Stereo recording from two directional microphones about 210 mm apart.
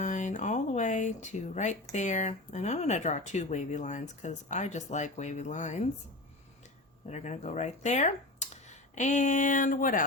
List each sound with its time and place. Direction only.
0.0 s speech: 35° left (ahead or behind)
7.1 s speech: 35° left (ahead or behind)